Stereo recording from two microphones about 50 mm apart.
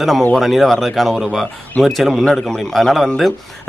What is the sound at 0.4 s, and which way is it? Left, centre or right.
Speech, centre.